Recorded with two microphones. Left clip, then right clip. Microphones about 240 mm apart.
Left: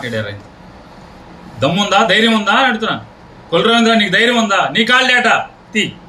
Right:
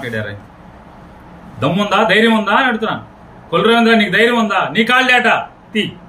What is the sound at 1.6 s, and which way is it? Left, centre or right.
A man's voice, centre.